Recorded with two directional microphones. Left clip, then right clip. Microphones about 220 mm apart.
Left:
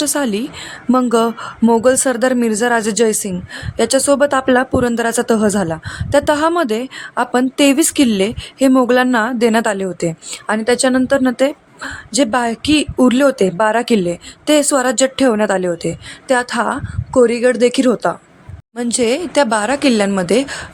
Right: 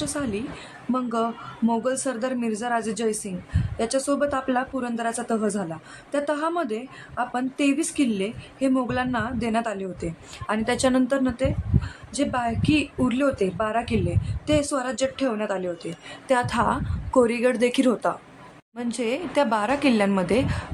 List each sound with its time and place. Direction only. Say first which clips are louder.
0.0 s a woman's voice: left 11 dB; 40° left (ahead or behind)
16.3 s a woman's voice: left 6 dB; 25° left (ahead or behind)